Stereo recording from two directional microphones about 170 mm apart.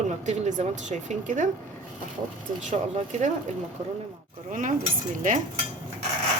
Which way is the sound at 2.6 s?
45° right (ahead or behind).